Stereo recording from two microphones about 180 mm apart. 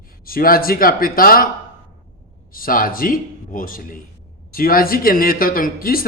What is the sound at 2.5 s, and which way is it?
Speech, 50° left (ahead or behind).